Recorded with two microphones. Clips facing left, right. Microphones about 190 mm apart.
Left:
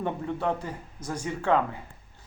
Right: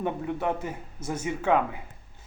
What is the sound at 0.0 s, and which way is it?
Speech, 10° right (ahead or behind).